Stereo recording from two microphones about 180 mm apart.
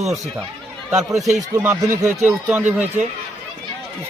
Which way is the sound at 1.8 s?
15° right (ahead or behind).